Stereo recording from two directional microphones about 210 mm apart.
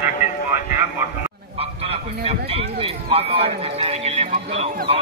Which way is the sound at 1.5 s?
30° right (ahead or behind).